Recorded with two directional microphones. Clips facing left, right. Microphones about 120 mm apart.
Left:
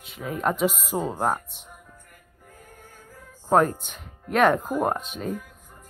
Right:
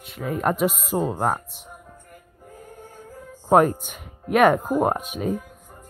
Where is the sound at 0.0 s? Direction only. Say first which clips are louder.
Right 3 dB; centre (ahead or behind).